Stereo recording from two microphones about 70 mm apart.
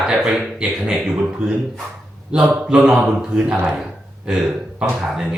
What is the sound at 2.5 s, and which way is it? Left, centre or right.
Speech, centre.